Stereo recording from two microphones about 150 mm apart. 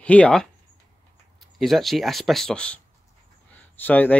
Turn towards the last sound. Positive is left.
turn(degrees=10)  # may be behind; listen again after turning